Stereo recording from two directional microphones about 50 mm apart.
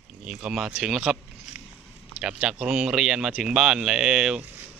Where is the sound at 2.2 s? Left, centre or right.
Centre.